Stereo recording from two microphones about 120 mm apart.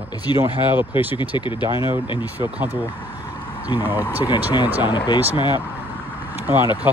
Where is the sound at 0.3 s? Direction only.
40° left (ahead or behind).